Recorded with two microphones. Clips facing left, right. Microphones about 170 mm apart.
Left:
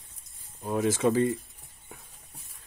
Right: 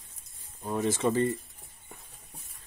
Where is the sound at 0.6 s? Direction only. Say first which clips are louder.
Left 3 dB; 5° left (ahead or behind).